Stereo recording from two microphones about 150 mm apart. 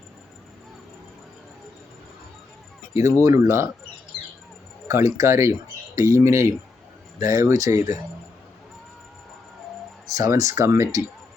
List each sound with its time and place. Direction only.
3.2 s speech: 20° right (ahead or behind)
4.9 s speech: 20° right (ahead or behind)
10.1 s speech: 20° right (ahead or behind)